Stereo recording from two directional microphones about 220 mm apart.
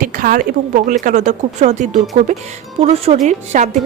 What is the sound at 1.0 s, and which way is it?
Speech, 35° right (ahead or behind).